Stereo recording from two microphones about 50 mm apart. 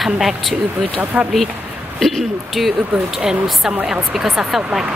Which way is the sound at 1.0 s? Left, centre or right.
Right.